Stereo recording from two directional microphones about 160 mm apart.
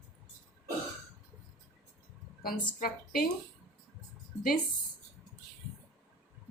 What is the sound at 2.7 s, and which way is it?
Speech, 65° left (ahead or behind).